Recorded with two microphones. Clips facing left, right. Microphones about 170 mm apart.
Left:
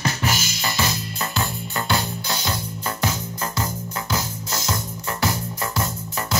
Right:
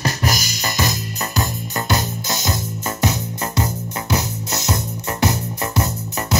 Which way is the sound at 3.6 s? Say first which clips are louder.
Right 3 dB; 20° right (ahead or behind).